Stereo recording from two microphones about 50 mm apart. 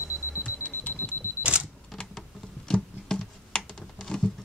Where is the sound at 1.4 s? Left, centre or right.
Right.